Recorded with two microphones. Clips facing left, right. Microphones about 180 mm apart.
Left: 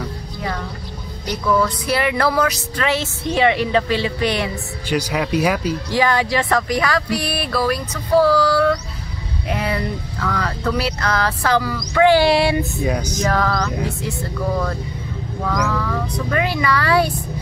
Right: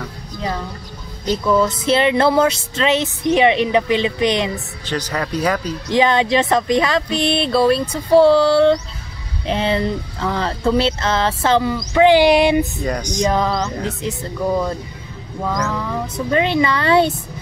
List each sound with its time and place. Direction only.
1.2 s speech: 20° right (ahead or behind)
4.8 s speech: 10° left (ahead or behind)
5.9 s speech: 20° right (ahead or behind)
12.8 s speech: 5° left (ahead or behind)
13.2 s speech: 20° right (ahead or behind)